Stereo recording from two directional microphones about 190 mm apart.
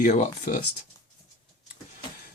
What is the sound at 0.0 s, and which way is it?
Speech, 40° left (ahead or behind).